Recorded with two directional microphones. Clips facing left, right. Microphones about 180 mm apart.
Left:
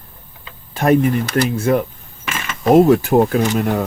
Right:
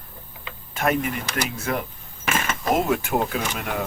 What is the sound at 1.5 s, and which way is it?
Speech, 30° left (ahead or behind).